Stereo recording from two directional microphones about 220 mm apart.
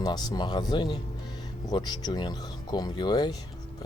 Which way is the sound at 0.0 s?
20° left (ahead or behind).